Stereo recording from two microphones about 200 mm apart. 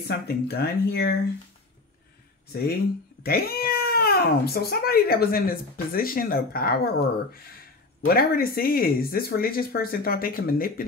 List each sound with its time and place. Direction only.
0.1 s speech: 50° left (ahead or behind)
3.3 s speech: 50° left (ahead or behind)